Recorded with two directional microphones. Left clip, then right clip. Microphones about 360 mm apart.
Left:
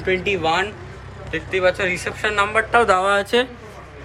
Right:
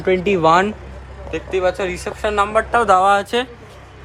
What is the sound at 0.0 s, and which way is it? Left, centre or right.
Speech, centre.